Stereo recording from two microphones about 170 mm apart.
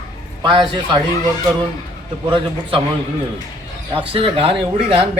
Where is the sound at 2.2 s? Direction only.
30° right (ahead or behind).